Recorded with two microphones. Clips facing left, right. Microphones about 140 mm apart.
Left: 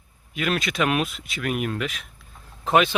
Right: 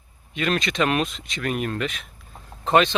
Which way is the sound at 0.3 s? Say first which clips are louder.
Right 1 dB; 5° left (ahead or behind).